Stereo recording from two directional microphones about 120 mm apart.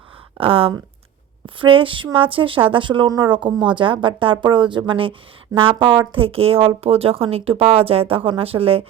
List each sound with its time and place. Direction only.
0.3 s speech: 50° right (ahead or behind)